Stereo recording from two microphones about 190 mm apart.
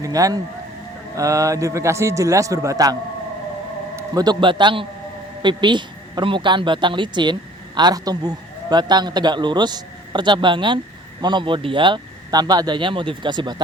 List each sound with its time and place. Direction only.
0.0 s a man's voice: 20° right (ahead or behind)
4.1 s a man's voice: 20° right (ahead or behind)